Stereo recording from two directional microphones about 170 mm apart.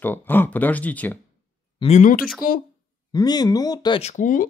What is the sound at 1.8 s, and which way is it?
Speech, 45° left (ahead or behind).